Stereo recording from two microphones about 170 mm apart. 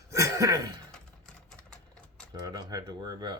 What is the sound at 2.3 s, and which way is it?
Speech, 25° right (ahead or behind).